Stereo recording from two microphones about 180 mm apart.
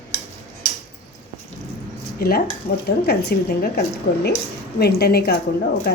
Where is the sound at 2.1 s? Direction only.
55° left (ahead or behind).